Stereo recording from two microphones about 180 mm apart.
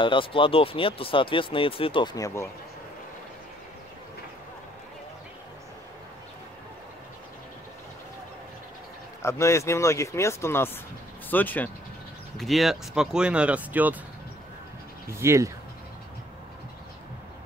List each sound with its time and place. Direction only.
0.0 s speech: 30° left (ahead or behind)
2.1 s speech: 15° left (ahead or behind)
9.2 s speech: 15° left (ahead or behind); by 13.9 s 10° right (ahead or behind)
15.0 s speech: 15° right (ahead or behind)